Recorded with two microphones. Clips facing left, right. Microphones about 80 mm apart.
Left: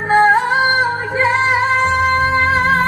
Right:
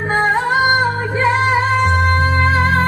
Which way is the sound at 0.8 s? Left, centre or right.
Centre.